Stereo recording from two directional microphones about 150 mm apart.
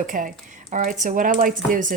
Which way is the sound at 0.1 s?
60° right (ahead or behind).